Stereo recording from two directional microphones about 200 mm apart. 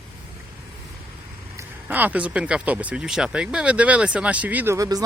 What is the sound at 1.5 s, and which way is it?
Speech, 10° right (ahead or behind).